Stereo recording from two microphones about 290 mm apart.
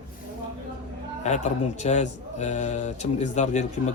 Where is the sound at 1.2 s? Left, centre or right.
Left.